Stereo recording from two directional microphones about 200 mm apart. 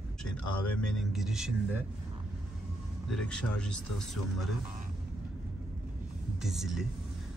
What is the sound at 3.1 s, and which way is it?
Speech, 5° left (ahead or behind).